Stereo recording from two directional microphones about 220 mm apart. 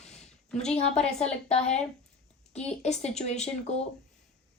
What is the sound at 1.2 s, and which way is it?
Speech, 30° left (ahead or behind).